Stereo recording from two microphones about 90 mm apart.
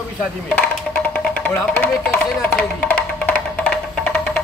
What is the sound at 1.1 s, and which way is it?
Speech, 15° left (ahead or behind).